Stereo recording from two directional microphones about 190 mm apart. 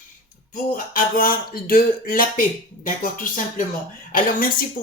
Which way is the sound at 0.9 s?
50° left (ahead or behind).